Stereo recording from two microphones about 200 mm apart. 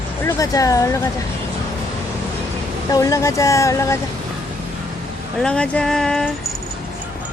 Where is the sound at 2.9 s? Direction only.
15° left (ahead or behind).